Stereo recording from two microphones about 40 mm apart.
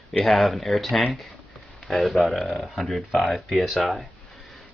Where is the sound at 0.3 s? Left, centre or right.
Centre.